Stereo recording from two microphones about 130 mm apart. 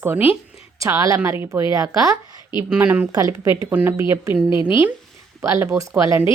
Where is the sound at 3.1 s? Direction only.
25° right (ahead or behind).